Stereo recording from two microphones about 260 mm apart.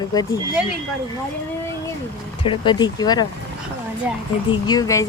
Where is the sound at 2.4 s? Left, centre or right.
Centre.